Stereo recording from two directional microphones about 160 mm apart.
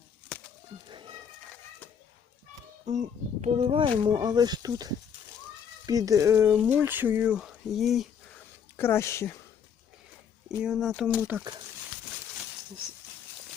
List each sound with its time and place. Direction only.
0.9 s a sound: 30° right (ahead or behind)
2.8 s a child's voice: 50° right (ahead or behind)
3.7 s speech: 35° right (ahead or behind); by 8.0 s centre (ahead or behind)
8.7 s speech: 15° left (ahead or behind)
10.6 s speech: centre (ahead or behind)